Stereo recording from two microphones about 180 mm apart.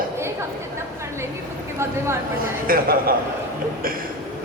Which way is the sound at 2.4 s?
55° right (ahead or behind).